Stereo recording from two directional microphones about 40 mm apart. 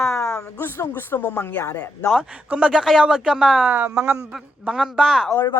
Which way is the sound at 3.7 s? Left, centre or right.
Right.